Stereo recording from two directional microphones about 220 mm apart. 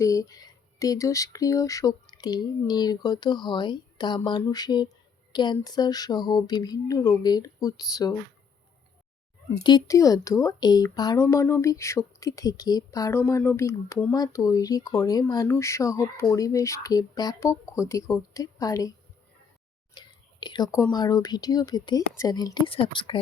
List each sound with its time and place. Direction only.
0.0 s speech: 15° left (ahead or behind)
9.6 s a woman's voice: 15° left (ahead or behind)
19.9 s whispering: 20° left (ahead or behind)
20.9 s speech: 20° left (ahead or behind)